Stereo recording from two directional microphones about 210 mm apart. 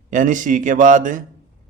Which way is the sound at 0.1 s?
40° right (ahead or behind).